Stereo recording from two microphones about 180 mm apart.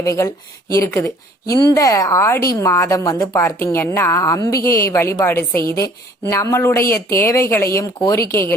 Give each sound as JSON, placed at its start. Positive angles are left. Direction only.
{"t": 0.0, "sound": "a woman's voice", "side_deg": 15}
{"t": 4.5, "sound": "speech", "side_deg": 55}
{"t": 4.9, "sound": "a woman's voice", "side_deg": 15}
{"t": 6.8, "sound": "speech", "side_deg": 55}
{"t": 7.4, "sound": "a woman's voice", "side_deg": 15}